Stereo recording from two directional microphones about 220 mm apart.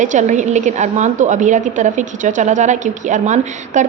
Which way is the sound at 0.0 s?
35° right (ahead or behind).